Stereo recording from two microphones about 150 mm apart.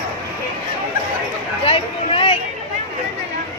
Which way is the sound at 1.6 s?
40° left (ahead or behind).